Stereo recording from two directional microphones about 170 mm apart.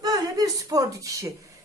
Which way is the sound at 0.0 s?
20° right (ahead or behind).